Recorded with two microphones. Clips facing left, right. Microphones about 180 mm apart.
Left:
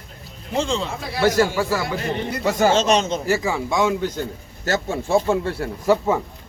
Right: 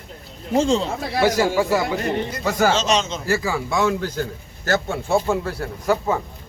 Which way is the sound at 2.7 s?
55° left (ahead or behind).